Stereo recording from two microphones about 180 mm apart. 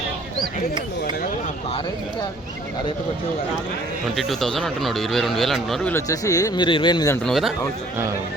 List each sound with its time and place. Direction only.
4.0 s speech: centre (ahead or behind)
5.9 s speech: 20° left (ahead or behind)
7.3 s speech: centre (ahead or behind)